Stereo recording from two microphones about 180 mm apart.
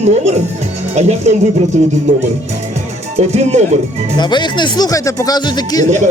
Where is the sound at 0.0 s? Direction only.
40° right (ahead or behind).